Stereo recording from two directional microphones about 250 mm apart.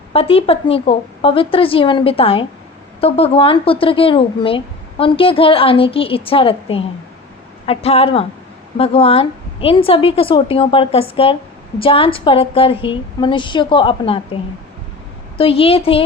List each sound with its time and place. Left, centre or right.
0.1 s a woman's voice: left
15.4 s a woman's voice: left